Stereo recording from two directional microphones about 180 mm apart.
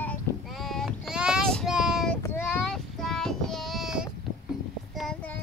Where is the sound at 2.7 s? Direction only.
Centre (ahead or behind).